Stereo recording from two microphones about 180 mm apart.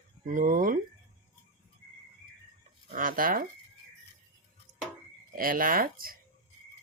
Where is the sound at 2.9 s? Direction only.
50° right (ahead or behind).